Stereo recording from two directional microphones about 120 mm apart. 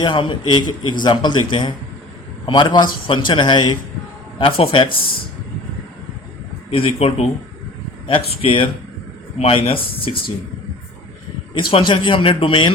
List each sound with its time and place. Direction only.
0.0 s a man's voice: 40° left (ahead or behind)
4.4 s a man's voice: 50° left (ahead or behind)
6.7 s a man's voice: 50° left (ahead or behind)
11.5 s a man's voice: 45° left (ahead or behind)